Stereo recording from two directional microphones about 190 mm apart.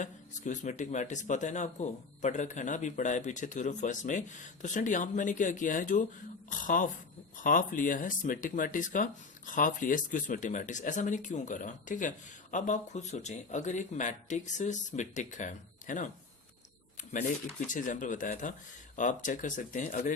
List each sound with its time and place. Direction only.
0.0 s speech: 40° left (ahead or behind)
17.7 s speech: 45° left (ahead or behind)